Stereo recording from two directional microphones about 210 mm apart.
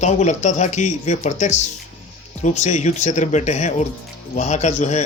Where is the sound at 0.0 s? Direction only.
35° left (ahead or behind).